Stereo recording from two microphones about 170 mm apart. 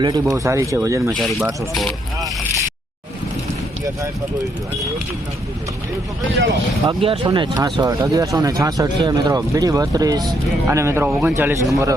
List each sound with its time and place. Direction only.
0.0 s speech: 20° right (ahead or behind)
1.2 s speech: centre (ahead or behind)
6.8 s speech: 30° right (ahead or behind)